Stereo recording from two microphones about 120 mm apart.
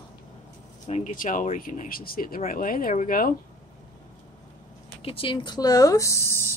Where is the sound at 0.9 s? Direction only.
90° left.